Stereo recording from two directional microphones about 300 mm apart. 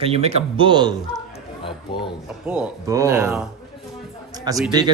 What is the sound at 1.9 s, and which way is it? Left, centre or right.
Speech, centre.